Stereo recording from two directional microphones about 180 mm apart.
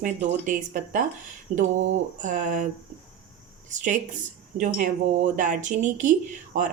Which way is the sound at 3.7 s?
45° right (ahead or behind).